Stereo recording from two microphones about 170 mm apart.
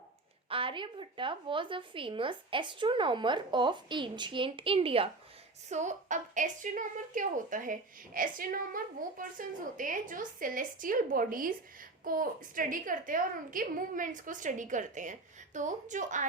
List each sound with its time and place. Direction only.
0.4 s speech: 30° right (ahead or behind)
5.6 s a woman's voice: 45° right (ahead or behind)